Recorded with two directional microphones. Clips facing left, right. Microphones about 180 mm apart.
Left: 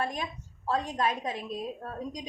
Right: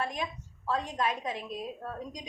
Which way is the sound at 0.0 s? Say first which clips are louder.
Left 1 dB; 35° left (ahead or behind).